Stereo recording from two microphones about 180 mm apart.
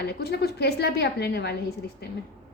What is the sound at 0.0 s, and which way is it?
A woman's voice, 65° left (ahead or behind).